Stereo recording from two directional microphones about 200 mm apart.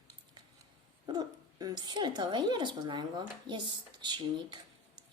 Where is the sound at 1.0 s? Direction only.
20° right (ahead or behind).